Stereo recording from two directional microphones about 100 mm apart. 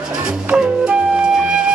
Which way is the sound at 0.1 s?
10° right (ahead or behind).